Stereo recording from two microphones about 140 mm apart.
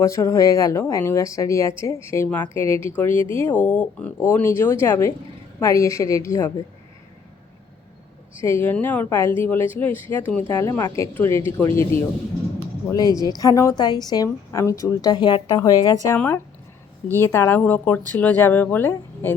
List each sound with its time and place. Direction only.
0.0 s a woman's voice: 20° left (ahead or behind)
8.4 s a woman's voice: 15° left (ahead or behind)